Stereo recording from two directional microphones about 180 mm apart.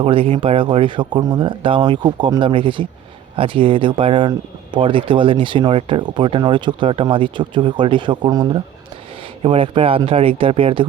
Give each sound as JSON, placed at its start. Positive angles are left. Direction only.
{"t": 0.0, "sound": "speech", "side_deg": -30}